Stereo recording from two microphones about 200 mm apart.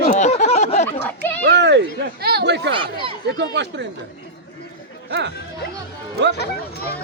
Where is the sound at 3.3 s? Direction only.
60° right (ahead or behind).